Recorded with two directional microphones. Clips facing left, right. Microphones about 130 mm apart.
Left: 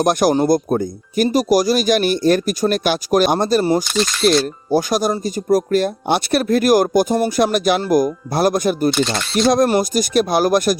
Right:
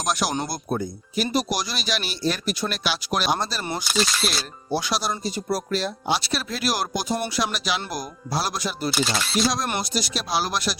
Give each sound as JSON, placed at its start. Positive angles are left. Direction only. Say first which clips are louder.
{"t": 0.0, "sound": "speech", "louder": "left 11 dB", "side_deg": 50}
{"t": 3.6, "sound": "speech", "louder": "left 9 dB", "side_deg": 35}